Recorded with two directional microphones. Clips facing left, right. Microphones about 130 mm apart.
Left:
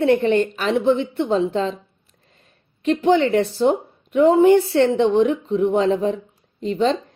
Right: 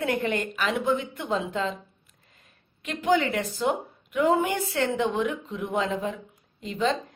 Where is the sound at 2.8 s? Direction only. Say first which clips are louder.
Left 7 dB; 35° left (ahead or behind).